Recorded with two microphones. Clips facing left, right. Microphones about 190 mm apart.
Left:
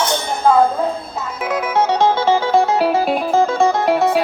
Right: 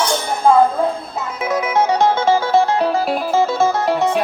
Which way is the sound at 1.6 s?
10° right (ahead or behind).